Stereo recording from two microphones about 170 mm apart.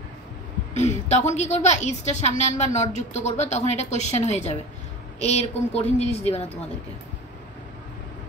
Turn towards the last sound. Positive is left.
turn(degrees=40)  # may be behind; listen again after turning